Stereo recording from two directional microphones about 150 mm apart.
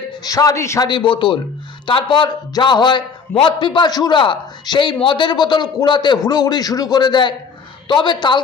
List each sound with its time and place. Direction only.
0.2 s a man's voice: 25° left (ahead or behind)
0.9 s a man's voice: 35° left (ahead or behind)